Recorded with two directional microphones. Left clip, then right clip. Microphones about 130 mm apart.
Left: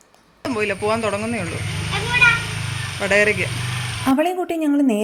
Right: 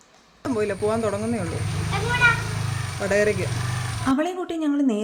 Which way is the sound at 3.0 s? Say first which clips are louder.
Left 5 dB; centre (ahead or behind).